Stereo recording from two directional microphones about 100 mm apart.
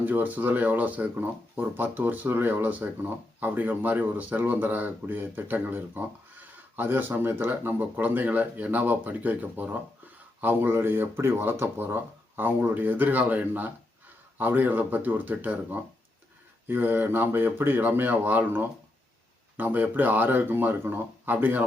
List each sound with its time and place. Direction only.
0.0 s speech: 20° right (ahead or behind)